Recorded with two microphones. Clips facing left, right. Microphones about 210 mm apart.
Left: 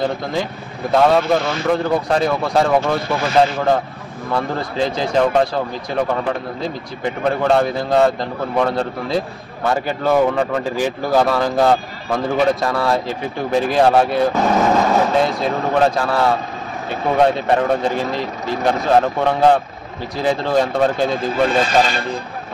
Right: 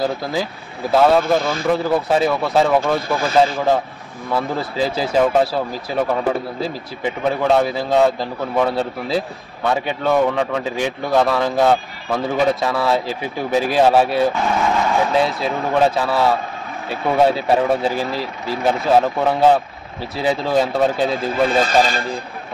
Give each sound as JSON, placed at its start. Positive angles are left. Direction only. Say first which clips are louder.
{"t": 0.0, "sound": "speech", "louder": "even", "side_deg": -5}
{"t": 14.3, "sound": "speech", "louder": "left 4 dB", "side_deg": 40}
{"t": 15.1, "sound": "speech", "louder": "left 1 dB", "side_deg": 0}